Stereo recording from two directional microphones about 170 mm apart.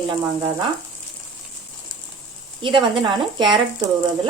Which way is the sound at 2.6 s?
30° right (ahead or behind).